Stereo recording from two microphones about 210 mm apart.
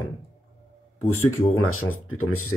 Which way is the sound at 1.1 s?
85° left.